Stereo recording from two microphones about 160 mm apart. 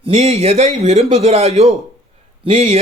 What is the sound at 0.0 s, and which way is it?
A man's voice, 40° right (ahead or behind).